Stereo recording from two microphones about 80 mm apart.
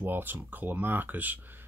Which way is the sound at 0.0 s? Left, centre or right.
Right.